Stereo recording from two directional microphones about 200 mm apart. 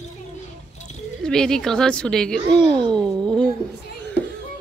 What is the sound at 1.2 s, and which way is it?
Speech, 5° left (ahead or behind).